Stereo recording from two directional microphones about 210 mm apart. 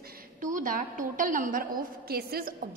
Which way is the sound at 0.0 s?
40° right (ahead or behind).